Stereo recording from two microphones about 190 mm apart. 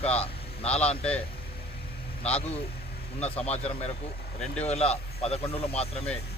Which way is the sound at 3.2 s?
30° left (ahead or behind).